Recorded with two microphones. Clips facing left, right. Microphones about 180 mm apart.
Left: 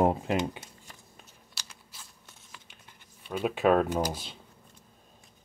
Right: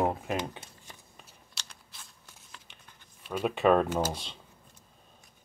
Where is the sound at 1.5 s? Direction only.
5° left (ahead or behind).